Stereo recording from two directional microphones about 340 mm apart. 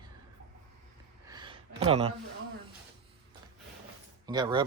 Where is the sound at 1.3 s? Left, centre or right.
Centre.